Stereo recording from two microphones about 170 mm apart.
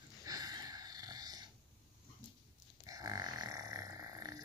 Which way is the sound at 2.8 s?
20° right (ahead or behind).